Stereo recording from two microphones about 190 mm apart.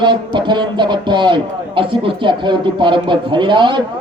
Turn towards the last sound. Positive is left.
turn(degrees=-25)  # may be behind; listen again after turning